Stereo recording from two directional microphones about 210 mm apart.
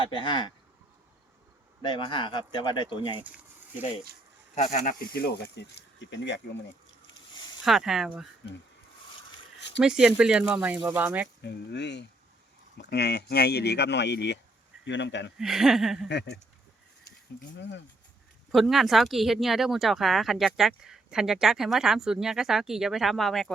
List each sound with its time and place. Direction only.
0.0 s speech: 20° left (ahead or behind)
1.8 s speech: 25° left (ahead or behind)
3.2 s a sound: 5° right (ahead or behind)
4.8 s speech: 45° left (ahead or behind)
7.6 s speech: centre (ahead or behind)
9.8 s speech: 5° right (ahead or behind)
11.4 s speech: 55° left (ahead or behind)
15.4 s speech: centre (ahead or behind)
16.0 s speech: 55° left (ahead or behind)
17.6 s speech: 55° left (ahead or behind)
18.5 s speech: centre (ahead or behind)